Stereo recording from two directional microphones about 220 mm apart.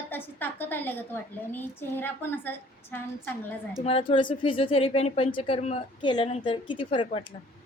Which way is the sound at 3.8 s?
25° left (ahead or behind).